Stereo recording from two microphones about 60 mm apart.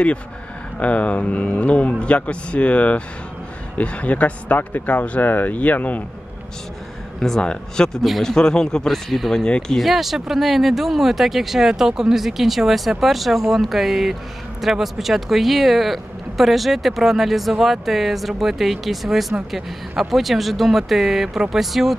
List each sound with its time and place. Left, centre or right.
0.7 s speech: left
7.2 s speech: centre
9.8 s speech: centre